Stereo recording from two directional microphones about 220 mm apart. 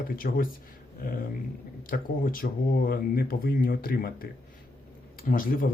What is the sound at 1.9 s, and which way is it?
Speech, 40° left (ahead or behind).